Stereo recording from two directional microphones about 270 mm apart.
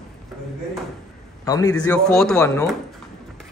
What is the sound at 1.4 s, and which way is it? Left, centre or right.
A man's voice, centre.